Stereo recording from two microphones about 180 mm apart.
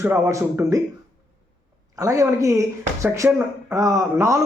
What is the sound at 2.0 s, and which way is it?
Speech, 20° right (ahead or behind).